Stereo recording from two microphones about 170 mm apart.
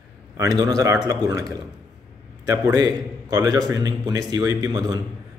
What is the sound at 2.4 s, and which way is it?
A man's voice, 20° right (ahead or behind).